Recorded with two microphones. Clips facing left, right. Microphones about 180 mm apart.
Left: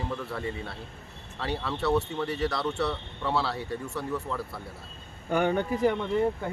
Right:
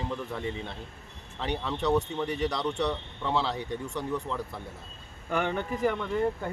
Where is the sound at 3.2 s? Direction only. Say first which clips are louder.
Even; 5° left (ahead or behind).